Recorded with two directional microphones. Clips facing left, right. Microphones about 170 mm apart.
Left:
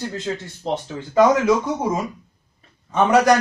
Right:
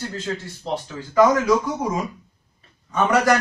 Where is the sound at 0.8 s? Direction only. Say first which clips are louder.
Left 1 dB; 20° left (ahead or behind).